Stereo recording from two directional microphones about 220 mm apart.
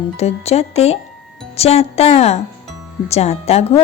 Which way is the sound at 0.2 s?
30° left (ahead or behind).